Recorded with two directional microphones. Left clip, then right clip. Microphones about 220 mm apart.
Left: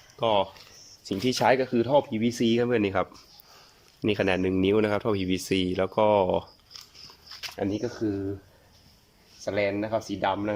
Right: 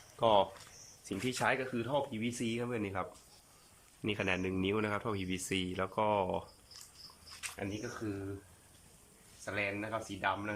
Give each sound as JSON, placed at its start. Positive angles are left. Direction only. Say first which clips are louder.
{"t": 0.2, "sound": "speech", "louder": "left 4 dB", "side_deg": 0}
{"t": 1.0, "sound": "speech", "louder": "left 11 dB", "side_deg": 20}
{"t": 1.5, "sound": "speech", "louder": "left 12 dB", "side_deg": 30}
{"t": 4.0, "sound": "speech", "louder": "left 10 dB", "side_deg": 25}
{"t": 7.5, "sound": "speech", "louder": "left 13 dB", "side_deg": 30}
{"t": 9.4, "sound": "speech", "louder": "left 10 dB", "side_deg": 30}